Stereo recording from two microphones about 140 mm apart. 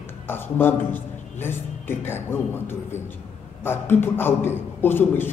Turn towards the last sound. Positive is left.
turn(degrees=15)  # may be behind; listen again after turning